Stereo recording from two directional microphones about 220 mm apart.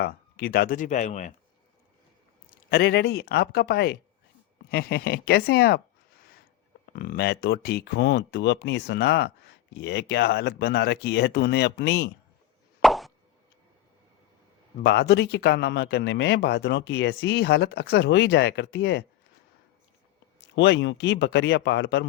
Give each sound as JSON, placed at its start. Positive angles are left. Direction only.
{"t": 0.0, "sound": "speech", "side_deg": 45}
{"t": 2.6, "sound": "speech", "side_deg": 45}
{"t": 12.8, "sound": "plop", "side_deg": 0}
{"t": 14.8, "sound": "speech", "side_deg": 50}
{"t": 20.6, "sound": "speech", "side_deg": 55}